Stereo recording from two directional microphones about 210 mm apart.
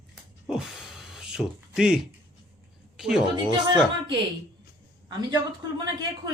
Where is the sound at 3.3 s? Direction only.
20° right (ahead or behind).